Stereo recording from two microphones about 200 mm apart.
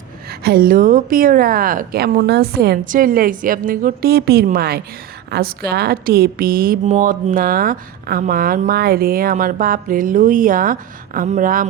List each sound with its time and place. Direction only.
0.3 s speech: 50° right (ahead or behind)